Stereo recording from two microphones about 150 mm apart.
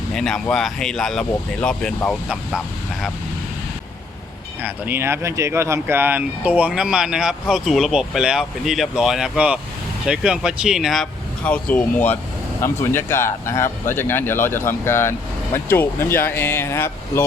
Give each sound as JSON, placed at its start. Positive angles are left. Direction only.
{"t": 0.1, "sound": "speech", "side_deg": 5}
{"t": 4.6, "sound": "speech", "side_deg": -15}